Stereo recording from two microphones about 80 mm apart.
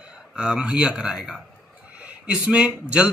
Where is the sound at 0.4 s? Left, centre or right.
Centre.